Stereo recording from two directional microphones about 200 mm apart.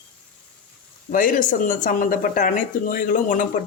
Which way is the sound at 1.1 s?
40° left (ahead or behind).